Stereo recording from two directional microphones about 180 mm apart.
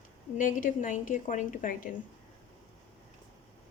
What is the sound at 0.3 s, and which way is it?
A woman's voice, 50° left (ahead or behind).